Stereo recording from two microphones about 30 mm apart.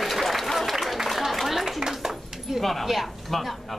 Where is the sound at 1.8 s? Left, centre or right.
Centre.